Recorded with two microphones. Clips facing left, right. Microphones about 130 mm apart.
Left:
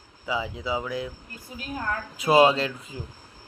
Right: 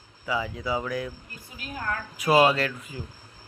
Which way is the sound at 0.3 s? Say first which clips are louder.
Even; 15° left (ahead or behind).